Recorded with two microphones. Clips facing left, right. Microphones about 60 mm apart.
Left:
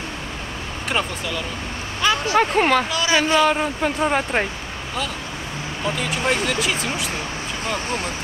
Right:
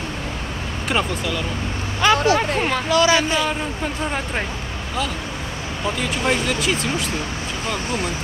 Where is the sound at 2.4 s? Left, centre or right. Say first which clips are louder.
Left 4 dB; left.